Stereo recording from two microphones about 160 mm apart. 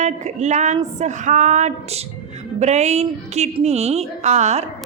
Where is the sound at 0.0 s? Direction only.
45° right (ahead or behind).